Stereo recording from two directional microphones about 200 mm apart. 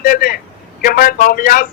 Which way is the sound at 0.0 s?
45° left (ahead or behind).